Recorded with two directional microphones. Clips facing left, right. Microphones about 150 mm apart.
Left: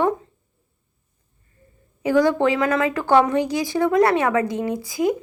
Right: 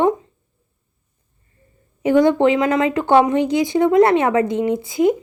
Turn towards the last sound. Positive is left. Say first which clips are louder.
# right 5 dB
turn(degrees=-25)  # may be behind; listen again after turning